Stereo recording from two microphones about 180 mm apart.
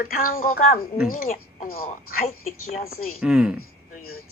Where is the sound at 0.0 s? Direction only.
55° left (ahead or behind).